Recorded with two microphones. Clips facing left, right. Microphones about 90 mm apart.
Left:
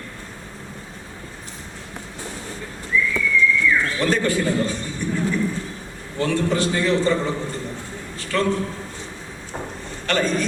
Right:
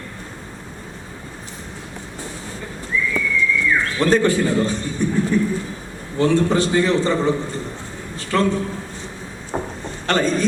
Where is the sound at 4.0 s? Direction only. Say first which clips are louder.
Right 4 dB; 25° right (ahead or behind).